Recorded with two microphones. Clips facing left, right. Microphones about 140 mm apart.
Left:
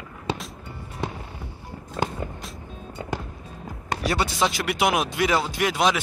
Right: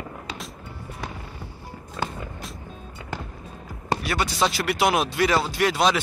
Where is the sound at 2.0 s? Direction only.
40° left (ahead or behind).